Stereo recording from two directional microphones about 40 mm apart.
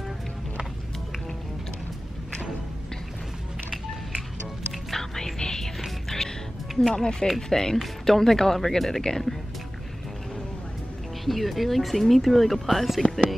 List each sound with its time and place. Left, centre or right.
4.9 s music: centre
6.9 s speech: centre
11.2 s speech: centre